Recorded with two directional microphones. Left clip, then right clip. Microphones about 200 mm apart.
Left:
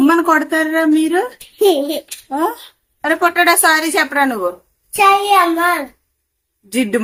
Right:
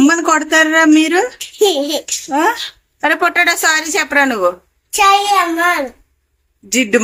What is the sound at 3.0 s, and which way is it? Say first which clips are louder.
Speech: right 1 dB; 20° right (ahead or behind).